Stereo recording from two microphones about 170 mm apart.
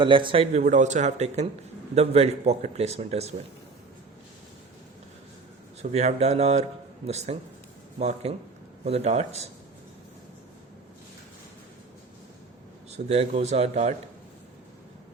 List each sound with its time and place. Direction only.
0.0 s speech: 30° right (ahead or behind)
0.6 s speech: 45° right (ahead or behind)
5.8 s speech: 40° right (ahead or behind)
12.9 s speech: 40° right (ahead or behind)